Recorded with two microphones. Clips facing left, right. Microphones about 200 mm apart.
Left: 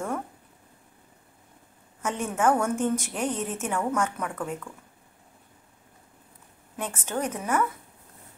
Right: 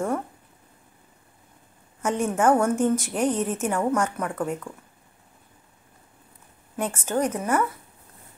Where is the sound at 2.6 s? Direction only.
45° right (ahead or behind).